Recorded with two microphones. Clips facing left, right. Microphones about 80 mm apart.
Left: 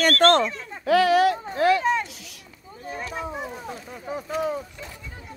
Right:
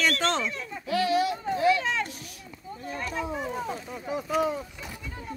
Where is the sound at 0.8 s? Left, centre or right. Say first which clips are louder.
Left 7 dB; left.